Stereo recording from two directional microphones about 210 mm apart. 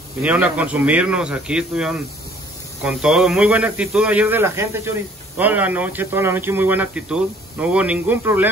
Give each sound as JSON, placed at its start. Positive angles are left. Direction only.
{"t": 0.2, "sound": "a man's voice", "side_deg": -5}